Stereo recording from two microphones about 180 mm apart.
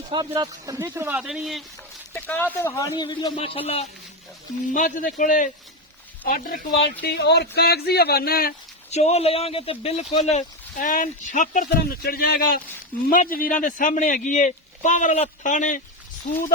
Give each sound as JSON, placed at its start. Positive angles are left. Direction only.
{"t": 0.1, "sound": "a man's voice", "side_deg": -25}
{"t": 2.1, "sound": "a man's voice", "side_deg": 10}
{"t": 4.7, "sound": "speech", "side_deg": 45}
{"t": 7.0, "sound": "speech", "side_deg": 70}
{"t": 8.9, "sound": "speech", "side_deg": 35}